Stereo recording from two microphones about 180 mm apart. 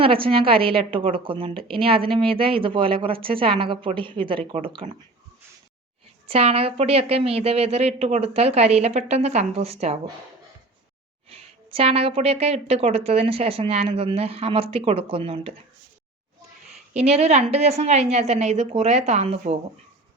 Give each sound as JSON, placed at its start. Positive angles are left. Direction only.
{"t": 0.0, "sound": "a woman's voice", "side_deg": -30}
{"t": 6.2, "sound": "a woman's voice", "side_deg": -35}
{"t": 11.3, "sound": "a woman's voice", "side_deg": -35}
{"t": 16.9, "sound": "a woman's voice", "side_deg": -35}